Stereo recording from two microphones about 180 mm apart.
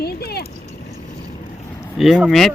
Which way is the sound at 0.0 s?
60° left (ahead or behind).